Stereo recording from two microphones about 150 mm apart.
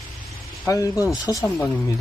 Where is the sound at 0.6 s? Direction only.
20° left (ahead or behind).